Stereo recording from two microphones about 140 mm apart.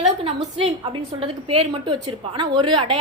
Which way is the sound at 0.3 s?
40° right (ahead or behind).